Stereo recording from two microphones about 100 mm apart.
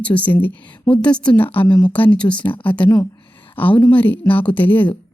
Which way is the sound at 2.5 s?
60° left (ahead or behind).